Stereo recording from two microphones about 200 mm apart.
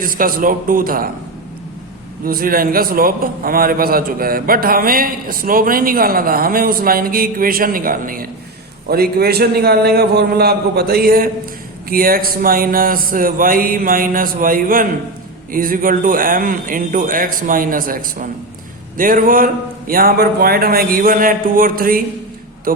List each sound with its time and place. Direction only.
0.0 s a man's voice: 45° right (ahead or behind)
2.2 s a man's voice: 45° right (ahead or behind)